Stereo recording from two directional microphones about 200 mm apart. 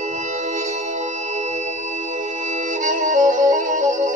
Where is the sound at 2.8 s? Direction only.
40° right (ahead or behind).